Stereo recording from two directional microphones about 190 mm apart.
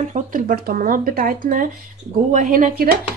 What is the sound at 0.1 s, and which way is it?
Speech, 45° right (ahead or behind).